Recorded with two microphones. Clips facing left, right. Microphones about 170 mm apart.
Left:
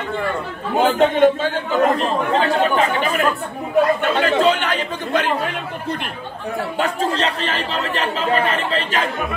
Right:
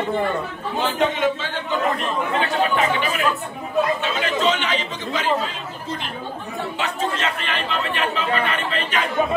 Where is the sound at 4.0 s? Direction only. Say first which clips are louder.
Left 6 dB; 55° left (ahead or behind).